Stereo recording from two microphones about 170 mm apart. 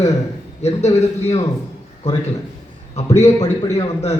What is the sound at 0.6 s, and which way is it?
Speech, 40° left (ahead or behind).